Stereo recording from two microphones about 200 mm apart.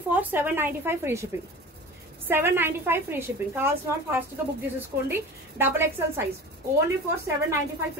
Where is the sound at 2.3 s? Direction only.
10° right (ahead or behind).